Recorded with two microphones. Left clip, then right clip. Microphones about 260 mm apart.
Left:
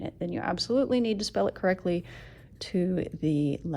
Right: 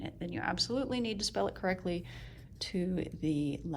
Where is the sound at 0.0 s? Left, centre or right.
Left.